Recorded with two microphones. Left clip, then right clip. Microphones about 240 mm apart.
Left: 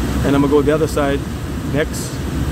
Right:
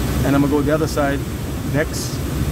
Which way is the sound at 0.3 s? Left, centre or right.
Centre.